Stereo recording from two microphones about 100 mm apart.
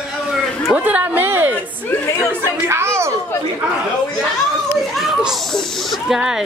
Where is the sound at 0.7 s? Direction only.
15° right (ahead or behind).